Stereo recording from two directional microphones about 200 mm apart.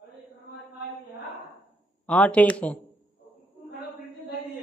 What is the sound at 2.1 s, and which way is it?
Speech, 5° left (ahead or behind).